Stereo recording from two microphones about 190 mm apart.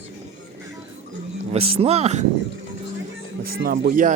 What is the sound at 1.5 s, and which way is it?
Speech, 35° right (ahead or behind).